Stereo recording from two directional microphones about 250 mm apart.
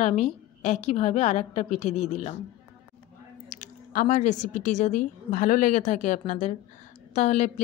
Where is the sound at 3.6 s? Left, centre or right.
Left.